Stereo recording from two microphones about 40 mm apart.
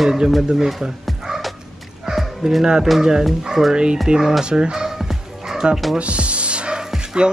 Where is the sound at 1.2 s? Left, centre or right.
Centre.